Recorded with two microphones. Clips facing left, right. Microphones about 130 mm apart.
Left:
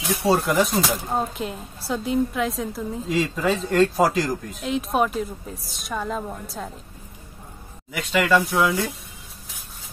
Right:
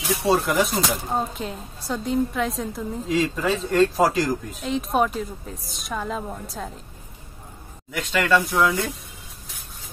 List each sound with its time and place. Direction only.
0.0 s speech: centre (ahead or behind)
7.9 s speech: 5° left (ahead or behind)